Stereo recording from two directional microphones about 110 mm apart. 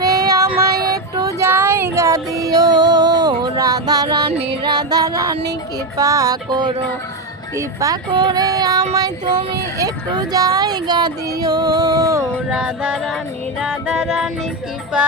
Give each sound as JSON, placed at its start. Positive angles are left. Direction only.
{"t": 0.0, "sound": "child singing", "side_deg": -35}
{"t": 1.5, "sound": "music", "side_deg": -20}
{"t": 4.3, "sound": "music", "side_deg": -65}
{"t": 4.6, "sound": "music", "side_deg": -40}
{"t": 6.0, "sound": "speech", "side_deg": -35}
{"t": 12.5, "sound": "music", "side_deg": -5}